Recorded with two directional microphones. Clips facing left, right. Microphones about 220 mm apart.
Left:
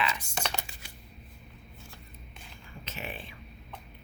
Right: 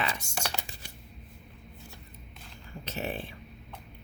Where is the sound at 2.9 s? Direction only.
40° right (ahead or behind).